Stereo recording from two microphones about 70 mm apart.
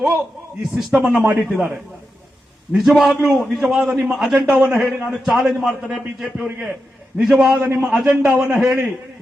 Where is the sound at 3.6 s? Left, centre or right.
Centre.